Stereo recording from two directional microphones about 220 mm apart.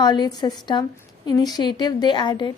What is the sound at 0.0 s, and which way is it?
A woman's voice, 20° left (ahead or behind).